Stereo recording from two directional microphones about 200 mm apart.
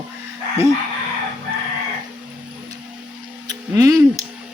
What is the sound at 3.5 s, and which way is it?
Speech, 15° right (ahead or behind).